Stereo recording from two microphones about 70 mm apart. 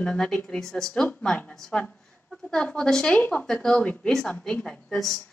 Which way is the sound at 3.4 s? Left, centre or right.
Centre.